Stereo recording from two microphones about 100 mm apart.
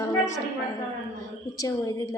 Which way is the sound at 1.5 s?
35° left (ahead or behind).